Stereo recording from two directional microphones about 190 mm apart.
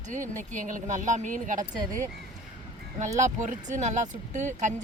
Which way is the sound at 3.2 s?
40° right (ahead or behind).